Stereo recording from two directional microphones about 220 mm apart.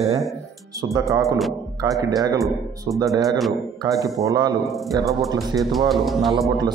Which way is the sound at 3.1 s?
15° right (ahead or behind).